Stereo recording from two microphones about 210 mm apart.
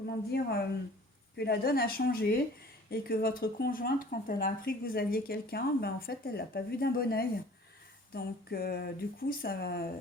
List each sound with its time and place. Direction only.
0.3 s speech: 50° left (ahead or behind)